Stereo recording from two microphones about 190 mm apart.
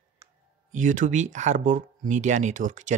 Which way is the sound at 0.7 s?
40° right (ahead or behind).